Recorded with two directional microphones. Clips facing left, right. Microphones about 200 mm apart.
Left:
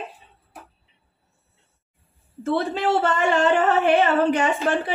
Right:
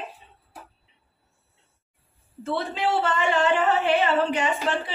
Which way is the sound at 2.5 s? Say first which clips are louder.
Left 3 dB; 45° left (ahead or behind).